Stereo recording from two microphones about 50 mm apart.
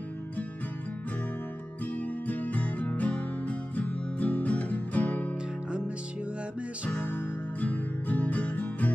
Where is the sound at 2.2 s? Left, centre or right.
Left.